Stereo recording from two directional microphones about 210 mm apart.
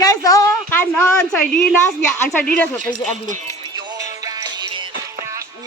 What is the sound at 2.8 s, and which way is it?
Speech, 35° right (ahead or behind).